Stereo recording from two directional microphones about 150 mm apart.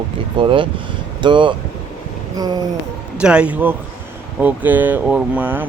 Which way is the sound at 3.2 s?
5° right (ahead or behind).